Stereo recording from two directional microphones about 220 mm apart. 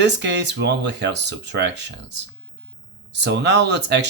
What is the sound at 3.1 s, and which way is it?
Speech, 50° right (ahead or behind).